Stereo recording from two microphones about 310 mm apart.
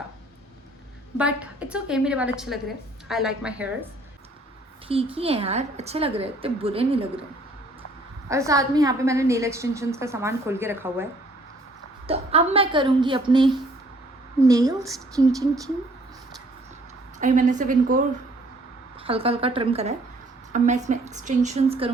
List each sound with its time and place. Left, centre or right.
1.2 s a woman's voice: centre
4.9 s a woman's voice: centre
8.3 s a woman's voice: centre
12.0 s a woman's voice: centre
17.2 s a woman's voice: right
19.0 s a woman's voice: centre